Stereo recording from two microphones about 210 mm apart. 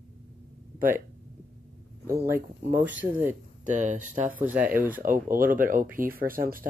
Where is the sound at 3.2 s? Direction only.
35° right (ahead or behind).